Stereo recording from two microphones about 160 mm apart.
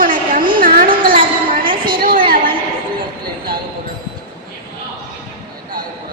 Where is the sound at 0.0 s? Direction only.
60° right (ahead or behind).